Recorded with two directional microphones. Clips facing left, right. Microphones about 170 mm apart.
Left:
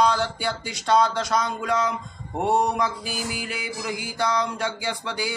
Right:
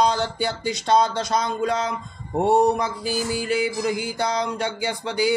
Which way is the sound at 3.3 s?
30° right (ahead or behind).